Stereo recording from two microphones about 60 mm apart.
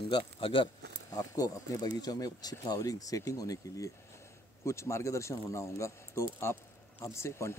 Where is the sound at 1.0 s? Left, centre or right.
Left.